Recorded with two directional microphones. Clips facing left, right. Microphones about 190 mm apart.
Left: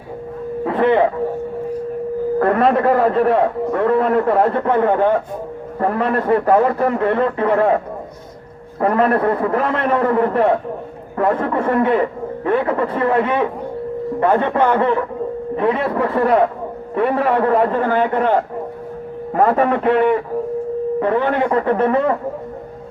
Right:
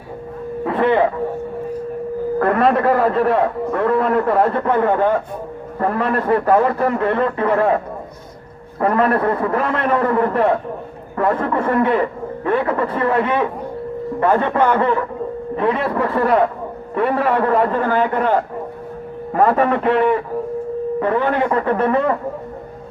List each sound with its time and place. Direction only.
0.6 s a sound: 25° left (ahead or behind)
2.4 s a man's voice: 30° left (ahead or behind)
8.8 s a man's voice: 25° left (ahead or behind)
21.0 s a man's voice: 25° left (ahead or behind)